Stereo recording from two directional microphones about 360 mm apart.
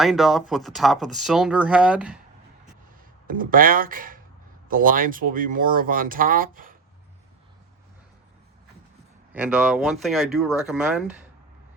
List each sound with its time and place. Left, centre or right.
0.0 s speech: centre
3.2 s speech: right
9.3 s speech: centre